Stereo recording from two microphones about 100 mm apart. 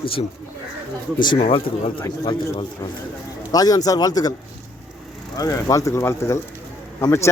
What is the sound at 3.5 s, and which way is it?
Speech, 40° left (ahead or behind).